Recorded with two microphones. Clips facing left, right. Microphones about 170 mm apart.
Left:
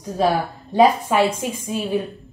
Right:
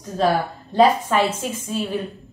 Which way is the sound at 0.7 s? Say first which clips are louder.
Left 1 dB; 10° left (ahead or behind).